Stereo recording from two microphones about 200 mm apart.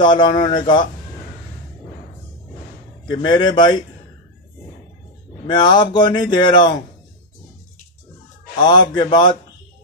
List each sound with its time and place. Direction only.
0.0 s speech: 20° left (ahead or behind)
3.1 s speech: 20° left (ahead or behind)
5.5 s speech: 20° left (ahead or behind)
8.5 s speech: 20° left (ahead or behind)